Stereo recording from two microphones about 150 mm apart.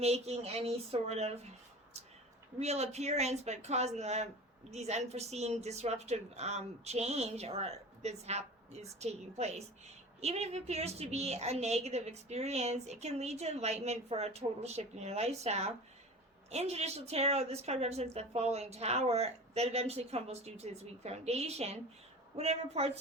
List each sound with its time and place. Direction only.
0.0 s a woman's voice: 45° right (ahead or behind)
2.6 s a woman's voice: 45° right (ahead or behind)